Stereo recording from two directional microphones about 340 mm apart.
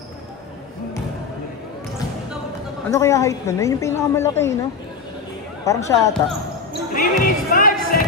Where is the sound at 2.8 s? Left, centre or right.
Centre.